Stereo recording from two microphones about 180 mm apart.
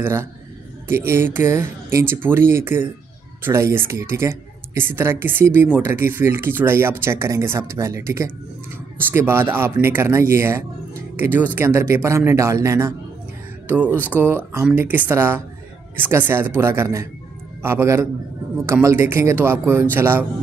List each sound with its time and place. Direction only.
0.0 s a woman's voice: 15° right (ahead or behind)